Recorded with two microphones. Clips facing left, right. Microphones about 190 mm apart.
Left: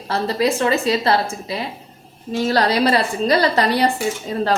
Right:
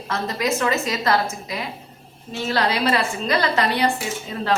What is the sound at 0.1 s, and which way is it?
A woman's voice, 30° left (ahead or behind).